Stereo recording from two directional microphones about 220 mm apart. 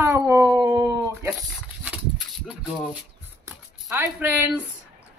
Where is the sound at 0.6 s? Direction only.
15° right (ahead or behind).